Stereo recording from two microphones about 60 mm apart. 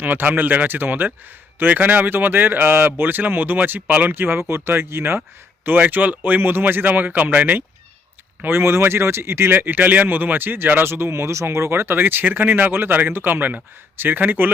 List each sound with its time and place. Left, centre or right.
0.0 s speech: right
8.4 s speech: right